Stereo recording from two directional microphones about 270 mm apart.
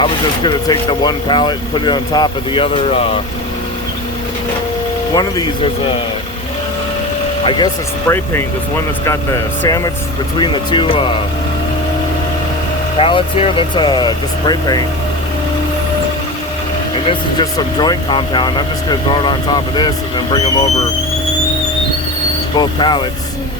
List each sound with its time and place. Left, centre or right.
0.0 s speech: centre
5.1 s speech: centre
7.4 s speech: centre
9.6 s speech: centre
13.0 s speech: centre
16.9 s speech: centre
22.5 s speech: centre